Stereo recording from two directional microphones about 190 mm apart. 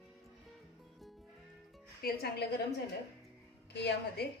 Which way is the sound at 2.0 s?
55° left (ahead or behind).